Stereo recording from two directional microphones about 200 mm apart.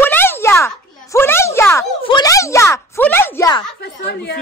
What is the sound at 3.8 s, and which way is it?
Speech, 55° left (ahead or behind).